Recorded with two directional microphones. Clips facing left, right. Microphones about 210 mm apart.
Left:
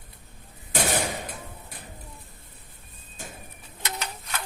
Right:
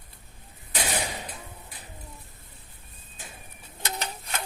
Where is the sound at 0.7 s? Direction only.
50° left (ahead or behind).